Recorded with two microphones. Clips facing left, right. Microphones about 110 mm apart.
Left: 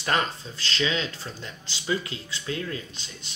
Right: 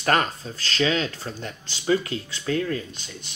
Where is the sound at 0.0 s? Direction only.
45° right (ahead or behind).